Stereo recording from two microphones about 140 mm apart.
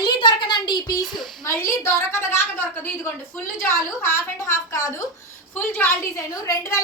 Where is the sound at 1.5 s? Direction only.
20° left (ahead or behind).